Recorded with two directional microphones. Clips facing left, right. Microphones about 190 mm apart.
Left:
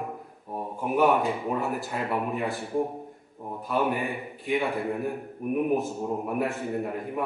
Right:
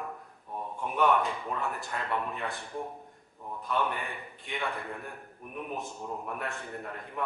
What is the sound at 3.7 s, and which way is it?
Speech, 5° left (ahead or behind).